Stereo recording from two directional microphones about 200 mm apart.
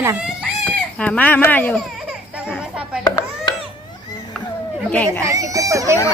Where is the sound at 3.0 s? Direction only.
20° left (ahead or behind).